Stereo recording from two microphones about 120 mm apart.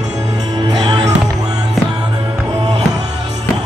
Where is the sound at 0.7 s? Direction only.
35° right (ahead or behind).